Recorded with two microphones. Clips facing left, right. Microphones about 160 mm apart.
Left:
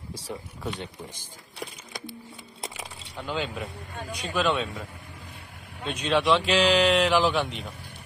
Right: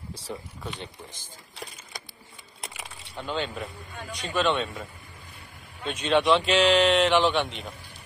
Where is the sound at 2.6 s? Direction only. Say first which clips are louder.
Left 3 dB; 30° left (ahead or behind).